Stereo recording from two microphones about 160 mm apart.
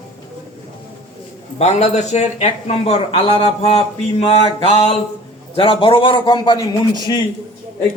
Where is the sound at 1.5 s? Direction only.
45° left (ahead or behind).